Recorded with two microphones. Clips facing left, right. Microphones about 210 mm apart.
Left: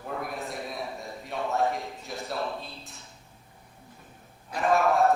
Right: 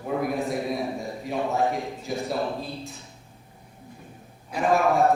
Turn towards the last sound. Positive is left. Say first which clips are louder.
# right 2 dB
turn(degrees=0)  # may be behind; listen again after turning